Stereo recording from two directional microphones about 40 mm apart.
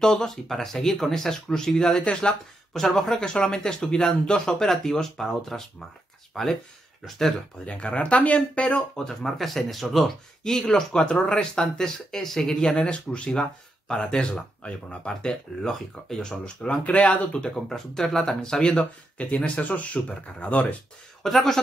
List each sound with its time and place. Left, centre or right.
0.0 s speech: centre
7.6 s speech: left
8.9 s speech: centre
10.4 s speech: centre
16.4 s speech: left
17.6 s speech: centre
19.1 s speech: left
21.2 s speech: centre